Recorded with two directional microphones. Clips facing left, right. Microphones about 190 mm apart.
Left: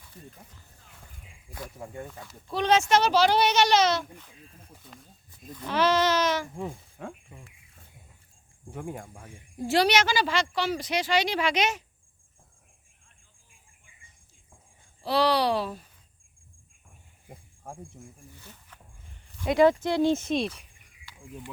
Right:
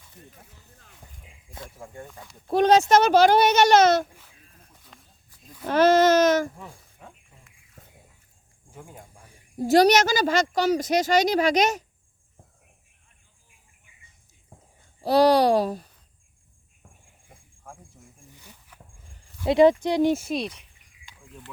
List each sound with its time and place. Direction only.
2.5 s speech: 45° right (ahead or behind)
4.9 s snake: centre (ahead or behind)
5.6 s speech: 45° right (ahead or behind)
7.0 s a sound: 70° left (ahead or behind)
8.7 s speech: 70° left (ahead or behind)
9.6 s speech: 40° right (ahead or behind)
15.0 s speech: 45° right (ahead or behind)
17.2 s cricket: 35° left (ahead or behind)
18.3 s a sound: 10° right (ahead or behind)
19.5 s speech: 20° right (ahead or behind); by 20.6 s centre (ahead or behind)